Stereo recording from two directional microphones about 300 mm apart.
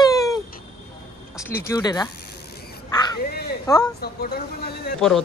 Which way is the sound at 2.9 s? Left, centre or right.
Centre.